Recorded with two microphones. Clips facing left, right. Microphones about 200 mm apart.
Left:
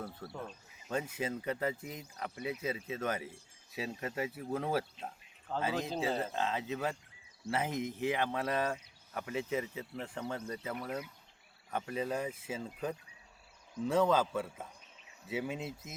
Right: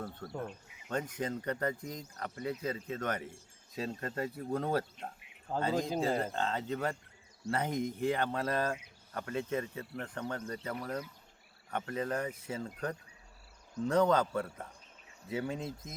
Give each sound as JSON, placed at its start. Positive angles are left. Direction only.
{"t": 0.0, "sound": "speech", "side_deg": 5}
{"t": 0.3, "sound": "speech", "side_deg": -15}
{"t": 0.9, "sound": "speech", "side_deg": 5}